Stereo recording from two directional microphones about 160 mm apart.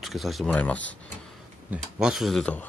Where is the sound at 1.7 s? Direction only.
5° right (ahead or behind).